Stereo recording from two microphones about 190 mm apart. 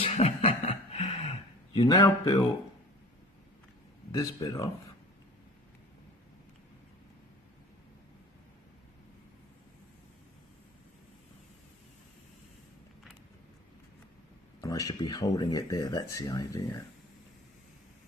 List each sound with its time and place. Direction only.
0.0 s a sound: 35° left (ahead or behind)
4.2 s speech: 20° left (ahead or behind)
14.6 s speech: 20° left (ahead or behind)